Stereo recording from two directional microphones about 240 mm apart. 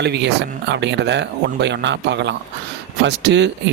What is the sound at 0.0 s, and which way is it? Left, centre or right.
Speech, right.